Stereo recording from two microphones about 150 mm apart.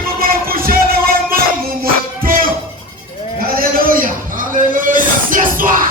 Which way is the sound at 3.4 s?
70° right (ahead or behind).